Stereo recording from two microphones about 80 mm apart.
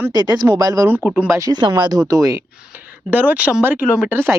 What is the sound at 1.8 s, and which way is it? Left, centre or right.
Speech, right.